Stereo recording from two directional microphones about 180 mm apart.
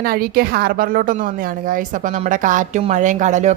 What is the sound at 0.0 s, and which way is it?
A woman's voice, 55° right (ahead or behind).